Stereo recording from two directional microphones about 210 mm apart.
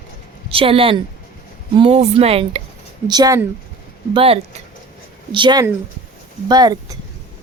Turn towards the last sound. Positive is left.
turn(degrees=-20)  # may be behind; listen again after turning